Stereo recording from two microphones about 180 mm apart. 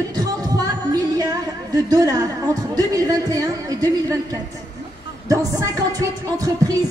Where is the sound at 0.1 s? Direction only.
20° right (ahead or behind).